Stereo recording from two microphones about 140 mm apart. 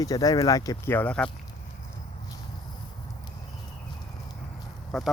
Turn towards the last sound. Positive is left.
turn(degrees=0)  # may be behind; listen again after turning